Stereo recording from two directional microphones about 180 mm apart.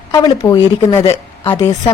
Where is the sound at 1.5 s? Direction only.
25° left (ahead or behind).